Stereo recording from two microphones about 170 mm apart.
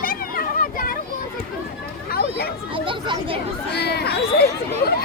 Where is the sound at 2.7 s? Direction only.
30° right (ahead or behind).